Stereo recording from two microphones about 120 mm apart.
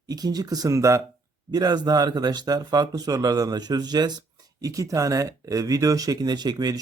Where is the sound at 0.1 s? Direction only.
30° right (ahead or behind).